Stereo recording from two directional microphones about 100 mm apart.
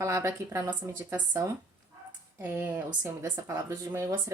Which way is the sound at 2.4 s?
20° right (ahead or behind).